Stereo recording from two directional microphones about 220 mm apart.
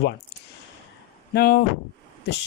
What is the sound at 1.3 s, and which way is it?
Speech, 45° left (ahead or behind).